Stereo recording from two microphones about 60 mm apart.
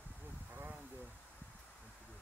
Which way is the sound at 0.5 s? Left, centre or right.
Right.